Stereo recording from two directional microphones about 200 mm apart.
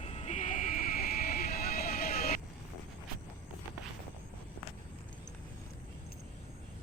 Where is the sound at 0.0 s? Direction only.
30° left (ahead or behind); by 2.4 s 50° left (ahead or behind).